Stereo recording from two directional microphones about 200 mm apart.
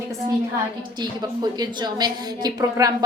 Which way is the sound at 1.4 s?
20° right (ahead or behind).